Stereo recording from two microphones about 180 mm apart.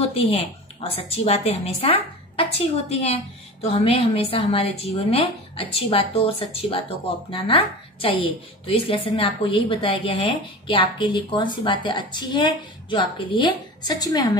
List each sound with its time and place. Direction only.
0.0 s a woman's voice: 35° left (ahead or behind)